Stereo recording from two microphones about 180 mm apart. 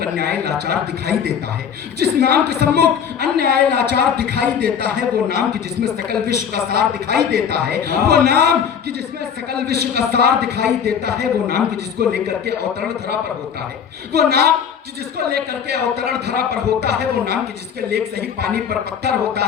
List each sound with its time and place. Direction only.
0.0 s speech: 60° right (ahead or behind)
6.1 s speech: 60° right (ahead or behind)
14.2 s speech: 60° right (ahead or behind)